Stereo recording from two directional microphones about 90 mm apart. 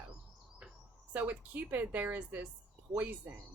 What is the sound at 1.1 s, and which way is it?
A woman's voice, 20° right (ahead or behind).